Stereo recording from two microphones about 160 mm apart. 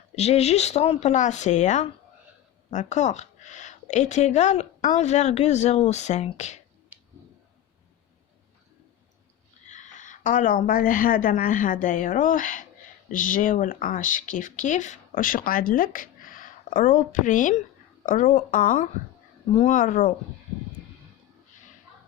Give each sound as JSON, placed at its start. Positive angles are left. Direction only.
{"t": 0.2, "sound": "speech", "side_deg": 40}
{"t": 6.9, "sound": "a sound", "side_deg": -10}
{"t": 9.6, "sound": "a woman's voice", "side_deg": 50}